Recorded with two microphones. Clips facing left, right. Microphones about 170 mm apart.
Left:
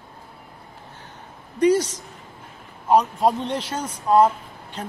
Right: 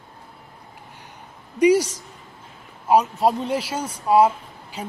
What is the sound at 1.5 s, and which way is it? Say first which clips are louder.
Speech: right 2 dB; 10° right (ahead or behind).